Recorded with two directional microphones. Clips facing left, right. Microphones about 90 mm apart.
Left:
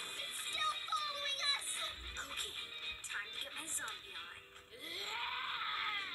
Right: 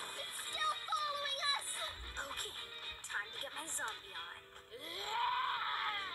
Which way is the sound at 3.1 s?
25° right (ahead or behind).